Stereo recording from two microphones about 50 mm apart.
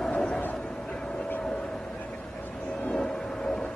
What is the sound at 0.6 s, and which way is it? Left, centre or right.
Vehicle, centre.